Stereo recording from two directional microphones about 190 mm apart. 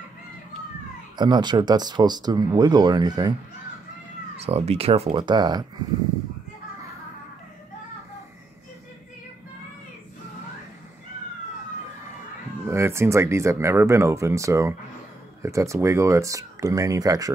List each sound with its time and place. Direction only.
1.1 s speech: 25° right (ahead or behind)
4.5 s speech: 30° right (ahead or behind)
12.6 s speech: 15° right (ahead or behind)